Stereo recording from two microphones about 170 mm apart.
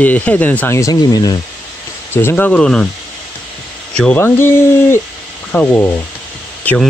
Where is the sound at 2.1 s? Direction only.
15° left (ahead or behind).